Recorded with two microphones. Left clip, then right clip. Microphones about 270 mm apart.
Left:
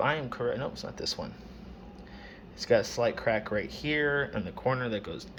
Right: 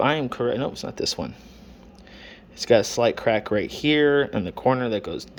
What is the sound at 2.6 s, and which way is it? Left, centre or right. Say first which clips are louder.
Speech: right 7 dB; right.